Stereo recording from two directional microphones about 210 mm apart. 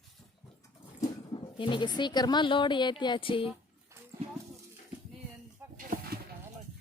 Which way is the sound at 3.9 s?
15° right (ahead or behind).